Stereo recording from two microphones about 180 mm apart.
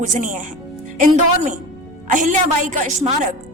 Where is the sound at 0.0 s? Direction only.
45° right (ahead or behind).